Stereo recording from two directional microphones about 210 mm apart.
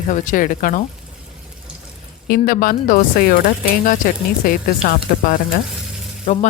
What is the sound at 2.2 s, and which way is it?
Speech, 45° left (ahead or behind).